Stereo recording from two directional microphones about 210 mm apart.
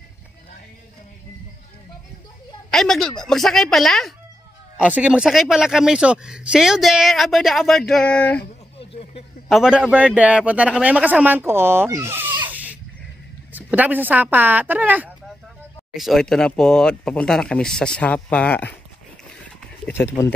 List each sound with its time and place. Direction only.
2.7 s speech: centre (ahead or behind)
8.7 s a sound: 25° left (ahead or behind)
9.5 s a man's voice: 5° right (ahead or behind)
13.5 s speech: 10° right (ahead or behind)